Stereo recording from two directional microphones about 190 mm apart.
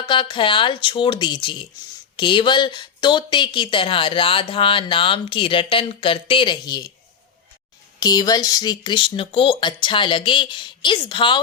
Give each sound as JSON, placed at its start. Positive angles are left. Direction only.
{"t": 0.0, "sound": "a woman's voice", "side_deg": 25}
{"t": 7.9, "sound": "a woman's voice", "side_deg": 20}